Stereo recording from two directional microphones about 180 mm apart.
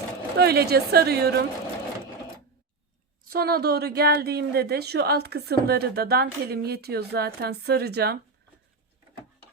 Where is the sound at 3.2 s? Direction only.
60° right (ahead or behind).